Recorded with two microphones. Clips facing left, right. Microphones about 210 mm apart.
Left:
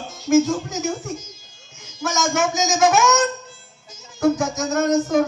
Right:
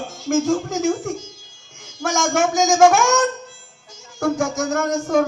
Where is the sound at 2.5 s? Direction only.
20° left (ahead or behind).